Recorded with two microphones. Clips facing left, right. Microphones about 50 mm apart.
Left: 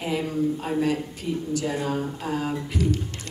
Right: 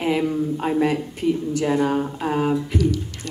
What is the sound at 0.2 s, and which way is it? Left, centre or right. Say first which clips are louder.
A woman's voice: right 3 dB; right.